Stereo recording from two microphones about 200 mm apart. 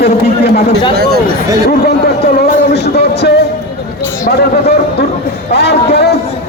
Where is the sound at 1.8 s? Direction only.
50° left (ahead or behind).